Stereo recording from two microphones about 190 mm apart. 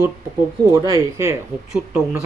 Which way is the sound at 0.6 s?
15° right (ahead or behind).